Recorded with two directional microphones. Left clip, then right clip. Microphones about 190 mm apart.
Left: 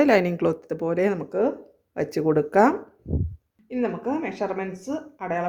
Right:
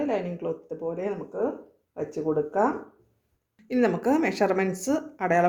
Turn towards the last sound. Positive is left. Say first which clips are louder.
# right 5 dB
turn(degrees=-25)  # may be behind; listen again after turning